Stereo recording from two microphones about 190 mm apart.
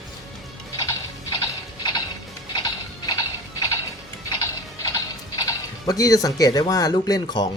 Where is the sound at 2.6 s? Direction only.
20° left (ahead or behind).